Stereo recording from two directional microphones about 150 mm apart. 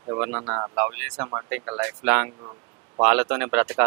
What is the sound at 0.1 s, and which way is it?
Speech, 10° right (ahead or behind).